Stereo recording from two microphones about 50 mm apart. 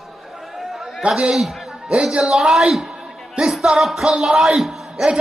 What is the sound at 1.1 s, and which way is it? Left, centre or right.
A man's voice, centre.